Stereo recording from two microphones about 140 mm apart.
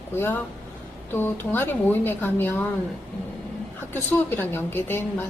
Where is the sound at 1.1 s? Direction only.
15° left (ahead or behind).